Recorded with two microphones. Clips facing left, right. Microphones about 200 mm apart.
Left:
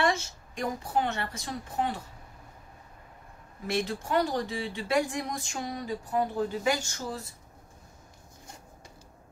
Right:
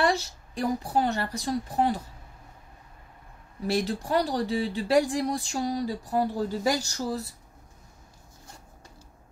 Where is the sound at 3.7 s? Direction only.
35° right (ahead or behind).